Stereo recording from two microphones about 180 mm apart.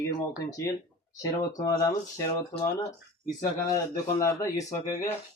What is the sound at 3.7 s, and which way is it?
Speech, 20° left (ahead or behind).